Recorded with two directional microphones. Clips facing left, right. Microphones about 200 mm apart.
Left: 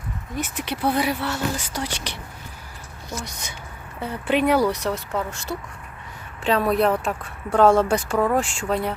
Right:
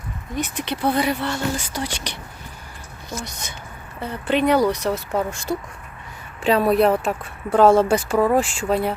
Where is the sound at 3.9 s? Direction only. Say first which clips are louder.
Right 1 dB; 10° left (ahead or behind).